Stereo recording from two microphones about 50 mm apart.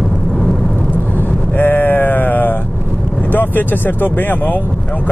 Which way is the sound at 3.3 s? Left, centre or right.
Left.